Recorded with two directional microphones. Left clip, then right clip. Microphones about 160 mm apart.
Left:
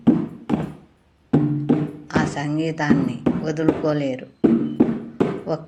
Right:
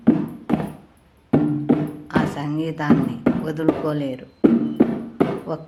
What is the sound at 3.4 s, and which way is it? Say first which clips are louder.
Speech: left 2 dB; 10° right (ahead or behind).